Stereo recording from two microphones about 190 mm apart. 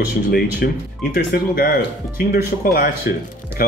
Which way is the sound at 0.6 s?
55° left (ahead or behind).